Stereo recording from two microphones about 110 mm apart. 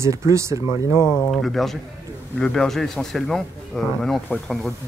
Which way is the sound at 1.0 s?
35° left (ahead or behind).